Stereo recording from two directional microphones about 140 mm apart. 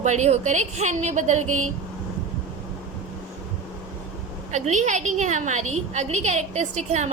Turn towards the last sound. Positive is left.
turn(degrees=-55)  # may be behind; listen again after turning